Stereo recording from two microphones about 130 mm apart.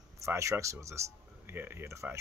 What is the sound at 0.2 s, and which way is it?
Speech, 20° right (ahead or behind).